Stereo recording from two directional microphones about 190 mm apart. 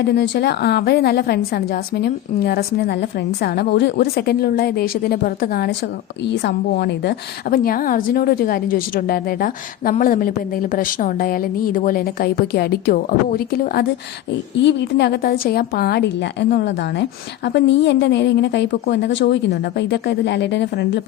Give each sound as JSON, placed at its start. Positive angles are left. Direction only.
{"t": 0.0, "sound": "a woman's voice", "side_deg": 60}
{"t": 14.6, "sound": "a woman's voice", "side_deg": 65}